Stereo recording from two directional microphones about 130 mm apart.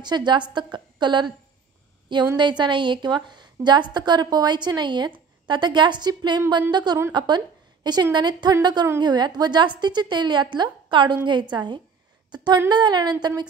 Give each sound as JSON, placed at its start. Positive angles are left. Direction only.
{"t": 0.0, "sound": "a woman's voice", "side_deg": -35}